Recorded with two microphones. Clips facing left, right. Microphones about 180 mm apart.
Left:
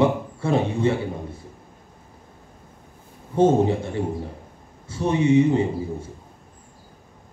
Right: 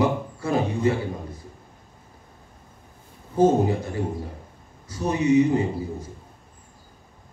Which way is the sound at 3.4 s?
25° left (ahead or behind).